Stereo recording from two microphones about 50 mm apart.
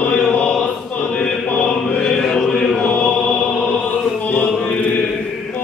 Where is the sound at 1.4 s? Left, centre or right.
Left.